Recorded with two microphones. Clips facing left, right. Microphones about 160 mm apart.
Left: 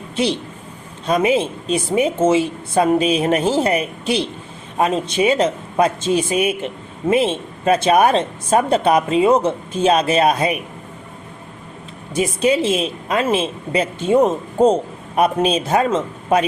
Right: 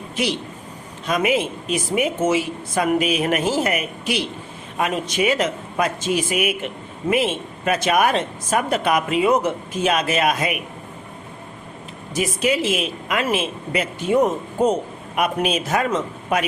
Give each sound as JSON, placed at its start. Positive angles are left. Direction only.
{"t": 1.0, "sound": "a woman's voice", "side_deg": 30}
{"t": 12.1, "sound": "a woman's voice", "side_deg": 30}